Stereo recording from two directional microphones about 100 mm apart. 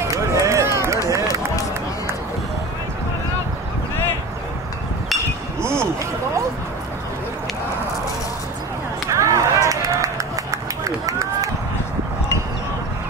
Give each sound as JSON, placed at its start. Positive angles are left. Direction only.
{"t": 0.0, "sound": "run", "side_deg": -30}
{"t": 5.6, "sound": "a sound", "side_deg": -25}
{"t": 9.1, "sound": "run", "side_deg": -30}